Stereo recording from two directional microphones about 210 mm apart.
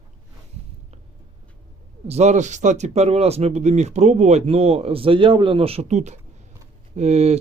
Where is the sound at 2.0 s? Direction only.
30° right (ahead or behind).